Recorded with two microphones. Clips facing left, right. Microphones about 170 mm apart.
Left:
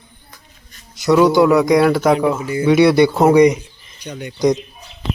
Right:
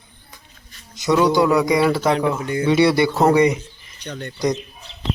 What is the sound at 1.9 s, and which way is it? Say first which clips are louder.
Speech: left 4 dB; 10° left (ahead or behind).